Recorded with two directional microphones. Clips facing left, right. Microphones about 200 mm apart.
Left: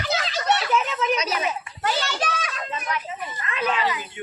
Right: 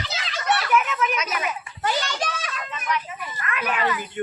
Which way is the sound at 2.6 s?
35° left (ahead or behind).